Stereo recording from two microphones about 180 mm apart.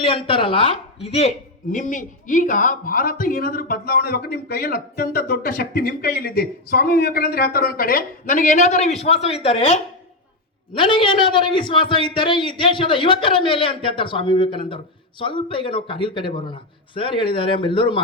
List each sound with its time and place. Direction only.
0.0 s a man's voice: 30° left (ahead or behind)
1.7 s a man's voice: 45° left (ahead or behind); by 18.0 s 30° left (ahead or behind)